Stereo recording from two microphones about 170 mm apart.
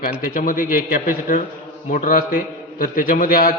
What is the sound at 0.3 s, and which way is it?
A man's voice, 55° left (ahead or behind).